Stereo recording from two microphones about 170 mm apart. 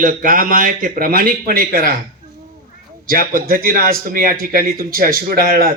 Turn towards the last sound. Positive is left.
turn(degrees=-60)  # may be behind; listen again after turning